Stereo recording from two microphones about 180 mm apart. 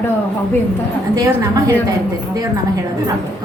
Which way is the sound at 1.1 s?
20° right (ahead or behind).